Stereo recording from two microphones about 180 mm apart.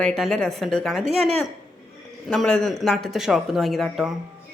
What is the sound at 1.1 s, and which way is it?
Speech, 35° right (ahead or behind).